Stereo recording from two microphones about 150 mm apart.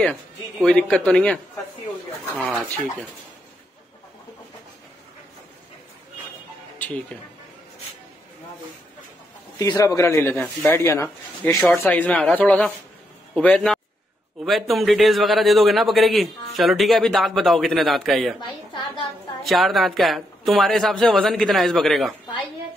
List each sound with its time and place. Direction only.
0.0 s a man's voice: 5° left (ahead or behind)
9.6 s a man's voice: 25° left (ahead or behind); by 18.3 s centre (ahead or behind)
19.4 s a man's voice: centre (ahead or behind)